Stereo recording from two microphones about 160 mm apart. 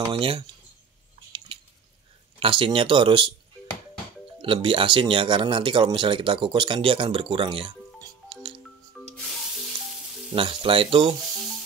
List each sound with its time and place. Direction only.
0.0 s speech: 35° right (ahead or behind)
2.4 s speech: 35° right (ahead or behind)
4.4 s speech: 30° right (ahead or behind)
8.3 s music: 30° right (ahead or behind)
8.9 s music: 5° left (ahead or behind)
10.3 s speech: 35° right (ahead or behind)